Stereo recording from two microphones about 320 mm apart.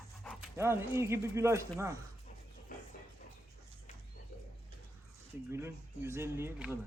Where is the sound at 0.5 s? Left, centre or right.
Centre.